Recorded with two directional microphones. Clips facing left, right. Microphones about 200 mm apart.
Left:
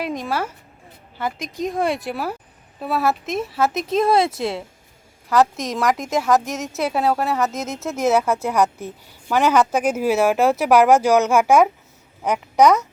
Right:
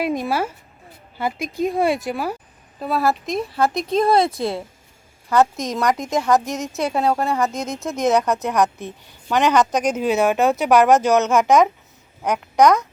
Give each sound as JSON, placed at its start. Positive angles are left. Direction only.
{"t": 0.0, "sound": "a woman's voice", "side_deg": -10}